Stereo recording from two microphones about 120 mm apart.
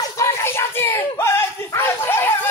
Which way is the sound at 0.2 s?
20° left (ahead or behind).